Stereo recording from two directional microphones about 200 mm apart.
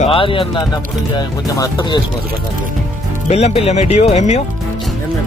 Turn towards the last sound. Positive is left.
turn(degrees=30)  # may be behind; listen again after turning